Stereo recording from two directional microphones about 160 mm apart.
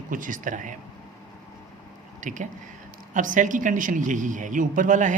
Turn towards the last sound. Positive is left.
turn(degrees=-50)  # may be behind; listen again after turning